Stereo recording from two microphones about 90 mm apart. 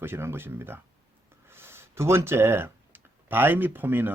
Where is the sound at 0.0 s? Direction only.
25° right (ahead or behind).